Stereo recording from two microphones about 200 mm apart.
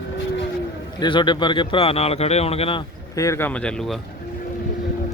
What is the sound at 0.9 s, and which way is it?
Speech, 25° left (ahead or behind).